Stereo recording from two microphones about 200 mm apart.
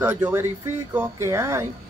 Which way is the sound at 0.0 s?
10° right (ahead or behind).